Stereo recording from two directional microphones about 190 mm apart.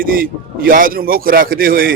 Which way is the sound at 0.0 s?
50° right (ahead or behind).